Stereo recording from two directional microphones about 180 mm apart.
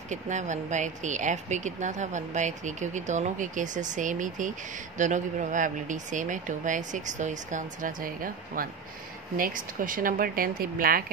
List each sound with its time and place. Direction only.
0.1 s speech: 40° right (ahead or behind)